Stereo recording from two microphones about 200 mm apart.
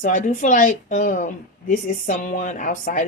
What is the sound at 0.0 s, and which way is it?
A woman's voice, 40° left (ahead or behind).